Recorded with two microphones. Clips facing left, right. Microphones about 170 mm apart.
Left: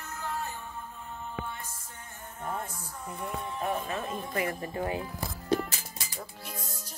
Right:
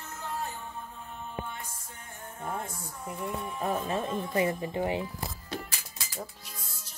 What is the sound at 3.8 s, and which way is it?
Speech, 30° right (ahead or behind).